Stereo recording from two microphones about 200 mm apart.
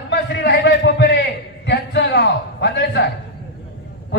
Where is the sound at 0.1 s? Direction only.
60° left (ahead or behind).